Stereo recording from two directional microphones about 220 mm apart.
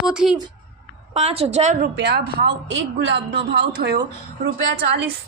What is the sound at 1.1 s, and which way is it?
Speech, 30° right (ahead or behind).